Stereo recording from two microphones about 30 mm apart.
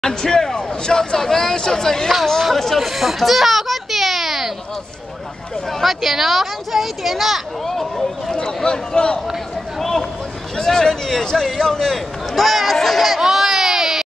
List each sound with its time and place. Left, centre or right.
0.0 s a man's voice: centre
2.5 s speech: centre
2.8 s a sound: centre
5.7 s speech: centre
7.6 s a man's voice: centre
8.9 s speech: left
9.8 s a sound: centre
10.6 s a man's voice: centre
13.2 s baby cry: centre